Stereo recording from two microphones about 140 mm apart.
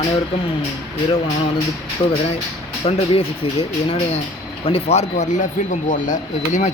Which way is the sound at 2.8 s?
45° left (ahead or behind).